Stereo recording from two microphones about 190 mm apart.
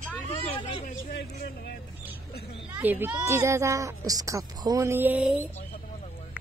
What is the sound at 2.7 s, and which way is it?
Speech, 10° right (ahead or behind).